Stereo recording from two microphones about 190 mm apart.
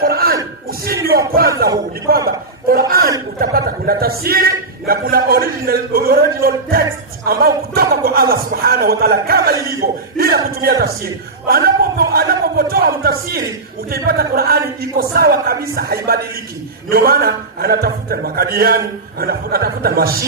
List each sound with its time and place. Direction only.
0.0 s a sound: 50° right (ahead or behind)
1.6 s a man's voice: 50° right (ahead or behind)
3.3 s a man's voice: 50° right (ahead or behind)